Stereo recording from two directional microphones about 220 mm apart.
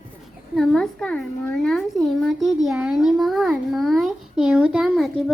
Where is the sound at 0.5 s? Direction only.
Centre (ahead or behind).